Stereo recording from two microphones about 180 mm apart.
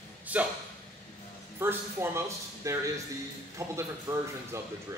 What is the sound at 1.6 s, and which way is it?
Speech, 15° right (ahead or behind).